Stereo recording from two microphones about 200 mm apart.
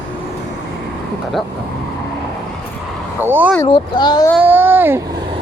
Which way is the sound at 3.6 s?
25° left (ahead or behind).